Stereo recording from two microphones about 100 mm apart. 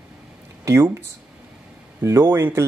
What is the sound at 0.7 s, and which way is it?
Speech, 30° right (ahead or behind).